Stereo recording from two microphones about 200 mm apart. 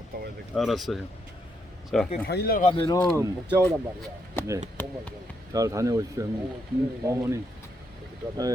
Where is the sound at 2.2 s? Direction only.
50° left (ahead or behind).